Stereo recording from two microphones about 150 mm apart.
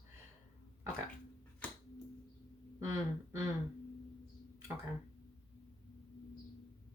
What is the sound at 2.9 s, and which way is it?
Speech, 20° right (ahead or behind).